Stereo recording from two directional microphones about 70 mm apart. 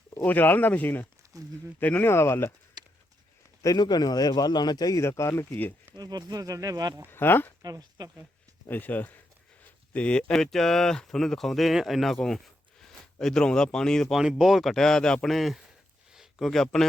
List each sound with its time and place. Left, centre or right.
0.3 s speech: left
1.3 s speech: right
1.8 s speech: left
2.8 s horse: right
3.8 s a man's voice: left
4.9 s speech: left
5.9 s speech: right
7.1 s speech: left
7.6 s speech: right
8.6 s speech: left; by 14.1 s centre
14.1 s speech: centre
15.3 s speech: centre